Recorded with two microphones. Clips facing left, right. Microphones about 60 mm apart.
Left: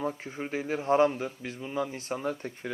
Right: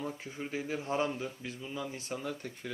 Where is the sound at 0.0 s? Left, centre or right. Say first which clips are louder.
Left 6 dB; left.